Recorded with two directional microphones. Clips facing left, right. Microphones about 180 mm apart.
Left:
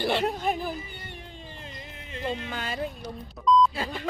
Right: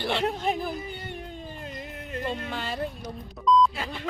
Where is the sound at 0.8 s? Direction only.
60° right (ahead or behind).